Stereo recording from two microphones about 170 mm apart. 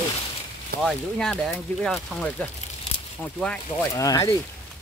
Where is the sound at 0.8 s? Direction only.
5° left (ahead or behind).